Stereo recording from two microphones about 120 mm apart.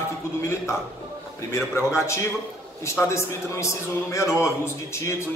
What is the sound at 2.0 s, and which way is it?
A man's voice, 25° left (ahead or behind).